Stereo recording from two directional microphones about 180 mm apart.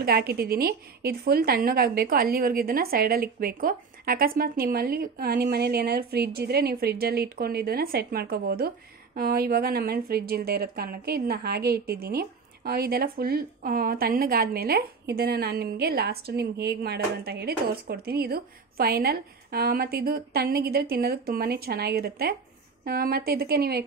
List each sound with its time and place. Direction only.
0.0 s a woman's voice: 60° right (ahead or behind)